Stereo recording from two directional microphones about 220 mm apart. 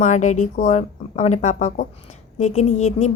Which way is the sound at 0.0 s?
35° left (ahead or behind).